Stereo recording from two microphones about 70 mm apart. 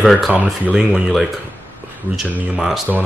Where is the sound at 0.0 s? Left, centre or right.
Centre.